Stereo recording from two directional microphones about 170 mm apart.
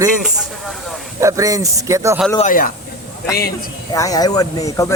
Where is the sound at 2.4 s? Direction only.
55° left (ahead or behind).